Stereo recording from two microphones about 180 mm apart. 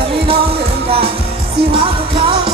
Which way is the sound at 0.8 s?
30° right (ahead or behind).